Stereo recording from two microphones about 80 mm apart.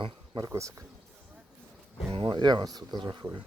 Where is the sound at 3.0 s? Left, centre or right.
Right.